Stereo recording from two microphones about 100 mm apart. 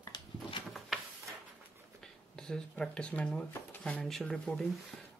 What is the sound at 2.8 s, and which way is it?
Speech, 10° left (ahead or behind).